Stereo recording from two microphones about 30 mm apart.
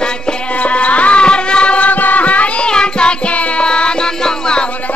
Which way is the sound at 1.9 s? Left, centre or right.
Left.